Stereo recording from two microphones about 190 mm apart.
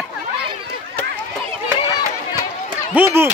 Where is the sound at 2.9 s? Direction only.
10° right (ahead or behind).